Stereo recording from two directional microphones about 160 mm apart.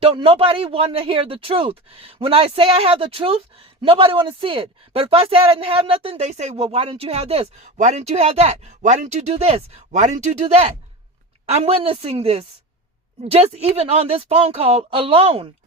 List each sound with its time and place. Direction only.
0.0 s a woman's voice: 35° right (ahead or behind)